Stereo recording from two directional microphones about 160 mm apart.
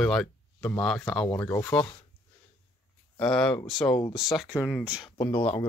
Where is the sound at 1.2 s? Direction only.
20° left (ahead or behind).